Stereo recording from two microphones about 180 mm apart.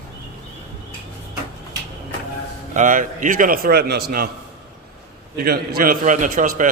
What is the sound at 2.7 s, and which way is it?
A man's voice, 45° right (ahead or behind).